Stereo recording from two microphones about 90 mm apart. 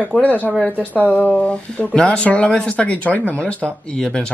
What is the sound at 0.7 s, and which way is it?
Speech, 20° right (ahead or behind).